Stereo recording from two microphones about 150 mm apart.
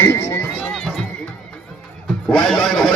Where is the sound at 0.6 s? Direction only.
5° left (ahead or behind).